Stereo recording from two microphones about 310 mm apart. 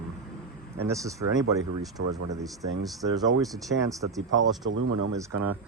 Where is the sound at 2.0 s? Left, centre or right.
Right.